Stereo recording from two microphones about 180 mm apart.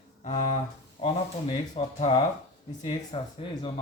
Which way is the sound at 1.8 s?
30° left (ahead or behind).